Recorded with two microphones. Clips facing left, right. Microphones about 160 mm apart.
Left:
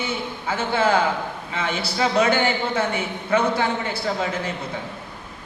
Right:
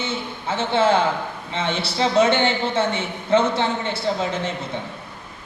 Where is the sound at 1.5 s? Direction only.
25° right (ahead or behind).